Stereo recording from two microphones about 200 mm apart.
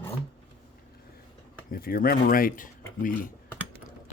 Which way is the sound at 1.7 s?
50° left (ahead or behind).